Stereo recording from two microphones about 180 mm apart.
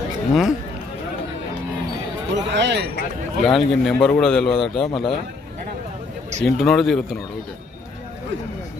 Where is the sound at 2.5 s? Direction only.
75° right (ahead or behind).